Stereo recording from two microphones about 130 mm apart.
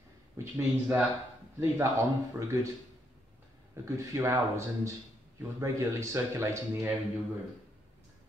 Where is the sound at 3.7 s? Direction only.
25° right (ahead or behind).